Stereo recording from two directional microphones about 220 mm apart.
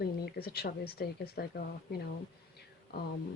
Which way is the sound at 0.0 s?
45° left (ahead or behind).